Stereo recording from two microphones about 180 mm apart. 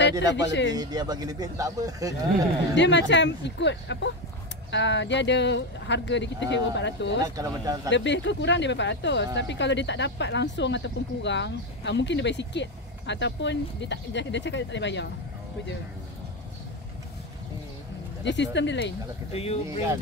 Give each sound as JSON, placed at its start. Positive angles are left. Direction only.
{"t": 0.7, "sound": "speech", "side_deg": -20}
{"t": 2.7, "sound": "speech", "side_deg": 80}
{"t": 7.2, "sound": "speech", "side_deg": -20}
{"t": 7.9, "sound": "speech", "side_deg": 85}
{"t": 18.2, "sound": "speech", "side_deg": 80}
{"t": 19.3, "sound": "speech", "side_deg": 35}